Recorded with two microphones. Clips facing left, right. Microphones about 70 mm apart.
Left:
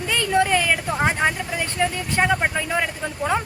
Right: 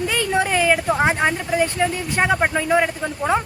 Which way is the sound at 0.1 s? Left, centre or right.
Centre.